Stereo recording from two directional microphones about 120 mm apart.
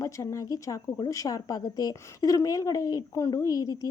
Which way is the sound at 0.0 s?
25° left (ahead or behind).